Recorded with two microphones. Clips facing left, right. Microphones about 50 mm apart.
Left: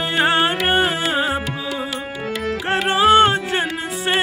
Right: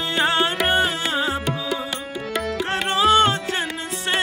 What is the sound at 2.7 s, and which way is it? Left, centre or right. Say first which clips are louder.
Music: left 4 dB; centre.